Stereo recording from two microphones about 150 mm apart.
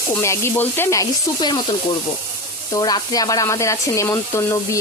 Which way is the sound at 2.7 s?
25° left (ahead or behind).